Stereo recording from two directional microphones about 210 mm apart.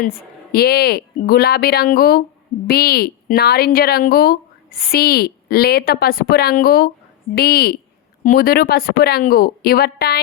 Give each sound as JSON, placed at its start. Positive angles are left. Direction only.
{"t": 0.0, "sound": "speech", "side_deg": 45}